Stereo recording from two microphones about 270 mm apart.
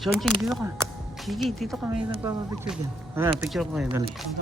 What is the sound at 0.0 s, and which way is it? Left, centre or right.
Speech, centre.